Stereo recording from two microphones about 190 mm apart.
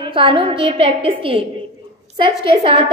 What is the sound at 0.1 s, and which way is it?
A woman's voice, 30° right (ahead or behind).